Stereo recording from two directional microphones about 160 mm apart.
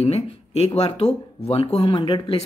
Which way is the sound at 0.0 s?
40° left (ahead or behind).